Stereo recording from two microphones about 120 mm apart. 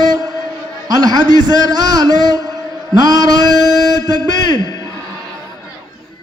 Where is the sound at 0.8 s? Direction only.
35° right (ahead or behind).